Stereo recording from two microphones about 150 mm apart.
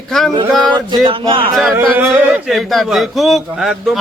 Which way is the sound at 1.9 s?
10° right (ahead or behind).